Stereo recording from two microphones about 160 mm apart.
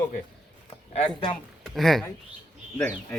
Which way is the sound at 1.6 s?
Centre (ahead or behind).